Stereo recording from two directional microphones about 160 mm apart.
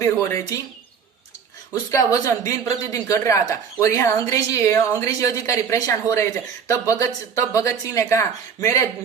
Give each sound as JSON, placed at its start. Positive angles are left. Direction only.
{"t": 0.0, "sound": "speech", "side_deg": 20}
{"t": 1.7, "sound": "speech", "side_deg": 20}